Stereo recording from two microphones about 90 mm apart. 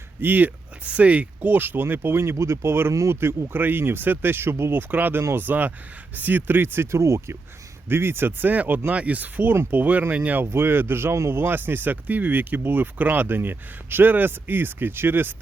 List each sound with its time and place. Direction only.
0.2 s speech: 20° right (ahead or behind)